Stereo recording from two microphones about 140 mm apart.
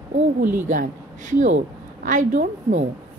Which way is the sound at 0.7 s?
65° right (ahead or behind).